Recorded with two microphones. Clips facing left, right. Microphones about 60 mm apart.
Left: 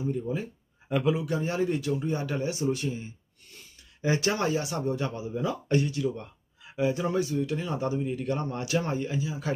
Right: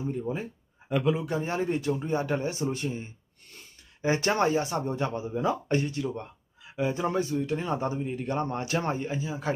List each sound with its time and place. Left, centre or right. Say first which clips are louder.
0.0 s speech: left 1 dB; right
0.9 s a man's voice: even; centre
1.2 s speech: left 1 dB; right
6.7 s a sound: left 2 dB; centre
6.9 s speech: even; right